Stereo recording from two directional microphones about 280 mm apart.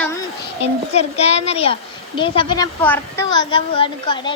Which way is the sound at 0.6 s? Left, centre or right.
Left.